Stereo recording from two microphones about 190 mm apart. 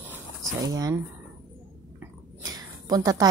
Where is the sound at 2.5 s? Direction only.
20° right (ahead or behind).